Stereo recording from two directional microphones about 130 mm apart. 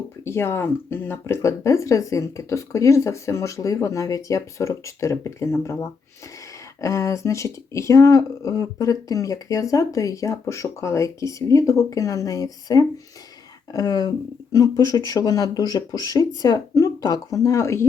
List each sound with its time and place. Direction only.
0.3 s speech: 20° left (ahead or behind)